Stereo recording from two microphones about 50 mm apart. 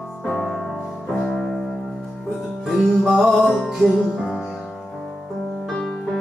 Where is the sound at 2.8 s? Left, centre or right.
Centre.